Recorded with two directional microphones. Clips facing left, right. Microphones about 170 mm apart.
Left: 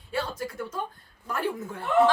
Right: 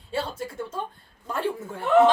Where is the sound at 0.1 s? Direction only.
25° right (ahead or behind).